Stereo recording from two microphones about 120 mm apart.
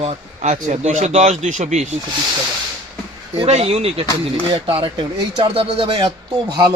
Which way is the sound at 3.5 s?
65° right (ahead or behind).